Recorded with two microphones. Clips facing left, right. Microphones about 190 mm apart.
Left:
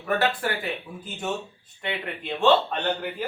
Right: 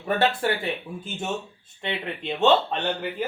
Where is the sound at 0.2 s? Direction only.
25° right (ahead or behind).